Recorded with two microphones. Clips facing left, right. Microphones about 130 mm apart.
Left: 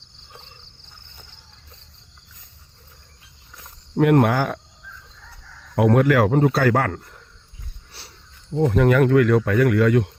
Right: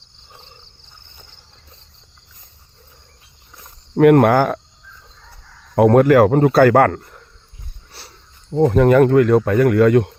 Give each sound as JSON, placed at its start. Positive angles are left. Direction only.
{"t": 3.9, "sound": "speech", "side_deg": -60}
{"t": 5.7, "sound": "speech", "side_deg": -40}
{"t": 8.5, "sound": "speech", "side_deg": -40}